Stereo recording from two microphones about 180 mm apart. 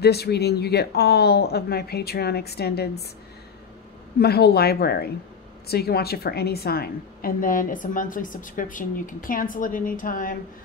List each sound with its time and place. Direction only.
0.0 s speech: 65° left (ahead or behind)
4.2 s a woman's voice: 65° left (ahead or behind)